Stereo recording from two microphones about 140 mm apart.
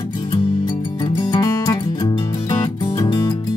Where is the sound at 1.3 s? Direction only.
25° left (ahead or behind).